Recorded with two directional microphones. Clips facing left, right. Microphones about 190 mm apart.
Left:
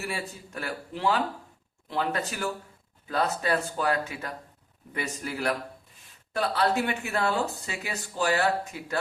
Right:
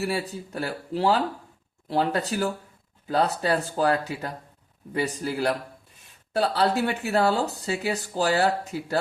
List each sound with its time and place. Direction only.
0.0 s speech: 35° right (ahead or behind)